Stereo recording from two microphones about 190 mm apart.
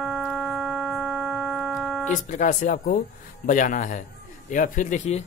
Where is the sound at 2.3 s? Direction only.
40° left (ahead or behind).